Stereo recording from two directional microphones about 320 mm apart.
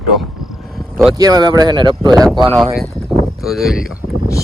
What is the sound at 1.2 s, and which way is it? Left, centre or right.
Speech, centre.